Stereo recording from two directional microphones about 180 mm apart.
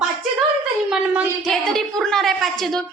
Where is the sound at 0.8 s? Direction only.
5° right (ahead or behind).